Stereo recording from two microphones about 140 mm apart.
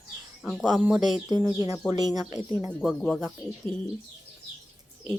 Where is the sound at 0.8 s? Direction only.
5° right (ahead or behind).